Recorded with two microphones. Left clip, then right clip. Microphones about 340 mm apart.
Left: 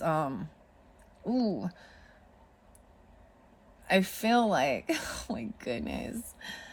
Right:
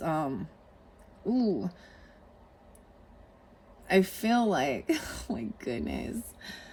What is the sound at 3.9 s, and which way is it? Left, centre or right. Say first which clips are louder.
Speech: even; centre.